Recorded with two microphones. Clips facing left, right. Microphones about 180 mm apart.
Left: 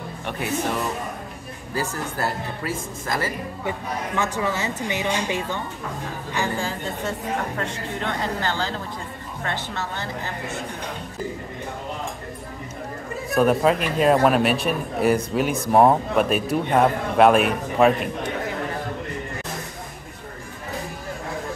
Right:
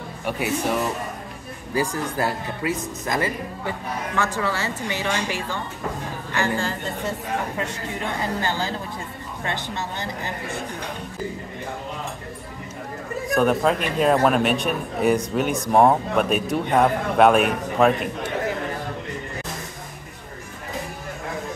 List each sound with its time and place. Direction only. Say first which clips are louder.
0.2 s speech: right 4 dB; 10° right (ahead or behind)
1.7 s speech: right 3 dB; 15° right (ahead or behind)
3.6 s a woman's voice: left 1 dB; 20° left (ahead or behind)
7.1 s speech: even; 10° right (ahead or behind)
13.3 s a man's voice: left 1 dB; 5° left (ahead or behind)